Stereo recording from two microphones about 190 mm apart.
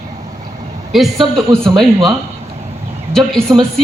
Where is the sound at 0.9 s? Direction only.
Centre (ahead or behind).